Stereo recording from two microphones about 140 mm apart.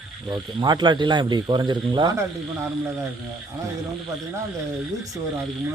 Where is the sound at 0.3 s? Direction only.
30° right (ahead or behind).